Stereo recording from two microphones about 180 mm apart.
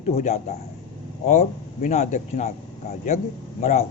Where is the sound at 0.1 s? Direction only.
40° left (ahead or behind).